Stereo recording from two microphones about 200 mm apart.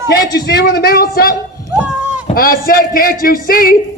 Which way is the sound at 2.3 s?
45° left (ahead or behind).